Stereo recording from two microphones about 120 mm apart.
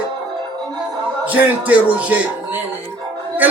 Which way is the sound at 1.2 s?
10° right (ahead or behind).